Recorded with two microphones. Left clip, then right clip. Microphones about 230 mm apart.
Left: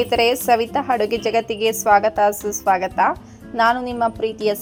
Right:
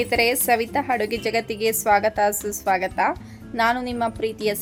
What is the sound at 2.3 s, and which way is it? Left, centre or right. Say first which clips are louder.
Speech: left 4 dB; centre.